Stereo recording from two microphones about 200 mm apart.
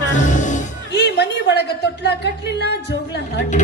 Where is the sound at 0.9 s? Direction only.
55° left (ahead or behind).